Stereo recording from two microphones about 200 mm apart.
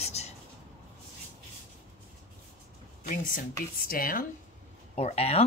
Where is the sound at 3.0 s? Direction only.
45° left (ahead or behind).